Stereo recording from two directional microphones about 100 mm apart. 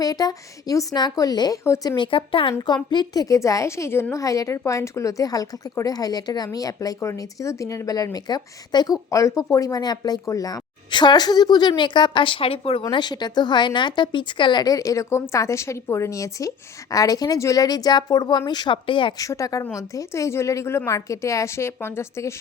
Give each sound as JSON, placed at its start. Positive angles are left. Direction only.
{"t": 0.0, "sound": "a woman's voice", "side_deg": 40}
{"t": 1.6, "sound": "a woman's voice", "side_deg": 25}
{"t": 2.0, "sound": "a woman's voice", "side_deg": 60}
{"t": 12.9, "sound": "a woman's voice", "side_deg": 45}
{"t": 19.1, "sound": "a woman's voice", "side_deg": 35}